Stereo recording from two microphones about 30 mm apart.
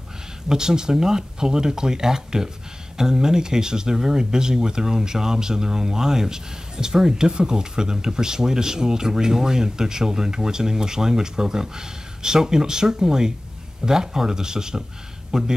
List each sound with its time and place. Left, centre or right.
0.5 s speech: right